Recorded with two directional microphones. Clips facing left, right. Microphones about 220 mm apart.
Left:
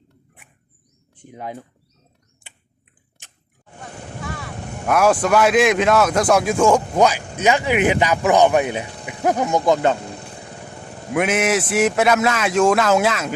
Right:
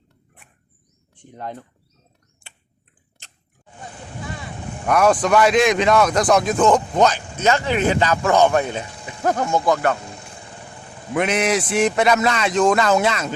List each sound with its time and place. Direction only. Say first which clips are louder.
1.1 s speech: left 1 dB; 5° left (ahead or behind)
4.9 s a man's voice: even; 5° left (ahead or behind); by 10.0 s 20° left (ahead or behind)
11.1 s a man's voice: left 1 dB; 5° left (ahead or behind)